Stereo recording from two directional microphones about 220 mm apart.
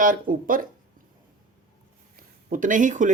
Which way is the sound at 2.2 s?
35° right (ahead or behind).